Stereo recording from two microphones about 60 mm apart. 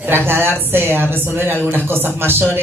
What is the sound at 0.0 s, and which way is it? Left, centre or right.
Speech, right.